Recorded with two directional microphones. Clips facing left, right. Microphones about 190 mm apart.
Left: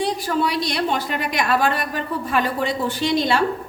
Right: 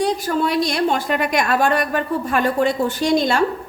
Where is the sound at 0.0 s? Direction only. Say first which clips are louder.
Right 2 dB; 50° right (ahead or behind).